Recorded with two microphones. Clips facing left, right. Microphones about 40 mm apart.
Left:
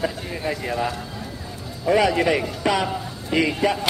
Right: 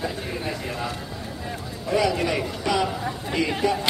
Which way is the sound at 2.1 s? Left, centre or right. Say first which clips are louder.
Left 4 dB; left.